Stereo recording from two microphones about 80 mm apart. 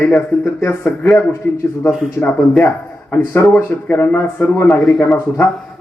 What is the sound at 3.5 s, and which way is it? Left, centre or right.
Speech, left.